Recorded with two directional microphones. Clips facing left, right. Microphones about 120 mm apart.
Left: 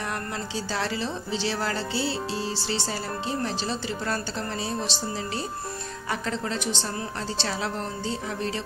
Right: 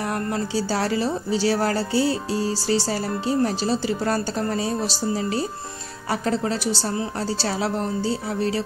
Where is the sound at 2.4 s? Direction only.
40° right (ahead or behind).